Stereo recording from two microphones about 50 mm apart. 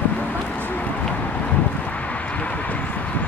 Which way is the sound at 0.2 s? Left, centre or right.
Left.